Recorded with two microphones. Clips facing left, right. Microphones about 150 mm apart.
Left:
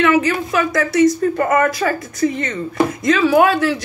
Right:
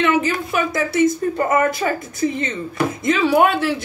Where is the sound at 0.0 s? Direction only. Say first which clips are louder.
Left 3 dB; 25° right (ahead or behind).